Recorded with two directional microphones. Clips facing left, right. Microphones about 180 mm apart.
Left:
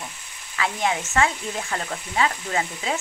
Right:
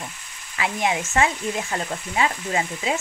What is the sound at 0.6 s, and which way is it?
Frying, 15° right (ahead or behind).